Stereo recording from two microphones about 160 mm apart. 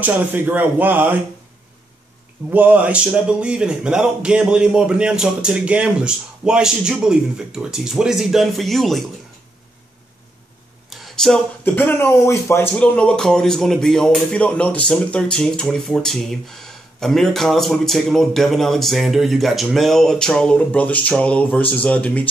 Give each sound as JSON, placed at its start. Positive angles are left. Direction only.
{"t": 0.0, "sound": "speech", "side_deg": -10}
{"t": 2.5, "sound": "speech", "side_deg": -10}
{"t": 10.9, "sound": "speech", "side_deg": 0}